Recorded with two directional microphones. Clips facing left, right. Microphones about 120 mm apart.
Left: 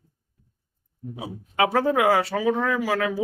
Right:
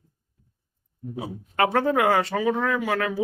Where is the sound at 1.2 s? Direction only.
5° left (ahead or behind).